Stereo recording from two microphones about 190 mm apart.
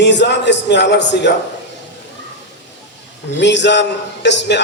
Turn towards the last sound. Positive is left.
turn(degrees=65)  # may be behind; listen again after turning